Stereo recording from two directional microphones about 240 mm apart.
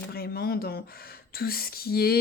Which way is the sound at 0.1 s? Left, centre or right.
Left.